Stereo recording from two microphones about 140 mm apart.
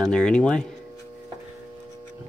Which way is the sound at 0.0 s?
5° left (ahead or behind).